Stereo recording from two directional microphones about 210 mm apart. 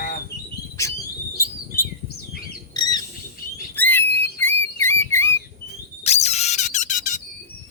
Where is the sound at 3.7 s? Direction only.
10° left (ahead or behind).